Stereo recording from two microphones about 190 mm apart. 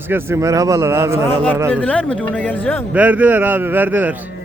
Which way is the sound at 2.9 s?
10° right (ahead or behind).